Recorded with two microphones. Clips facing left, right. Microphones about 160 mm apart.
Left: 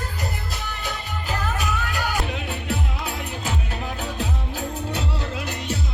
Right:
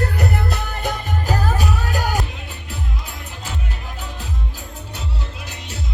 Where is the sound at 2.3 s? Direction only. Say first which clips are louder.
Left 7 dB; 75° left (ahead or behind).